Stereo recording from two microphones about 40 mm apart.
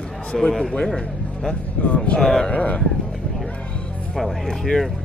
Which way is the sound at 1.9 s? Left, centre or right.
Left.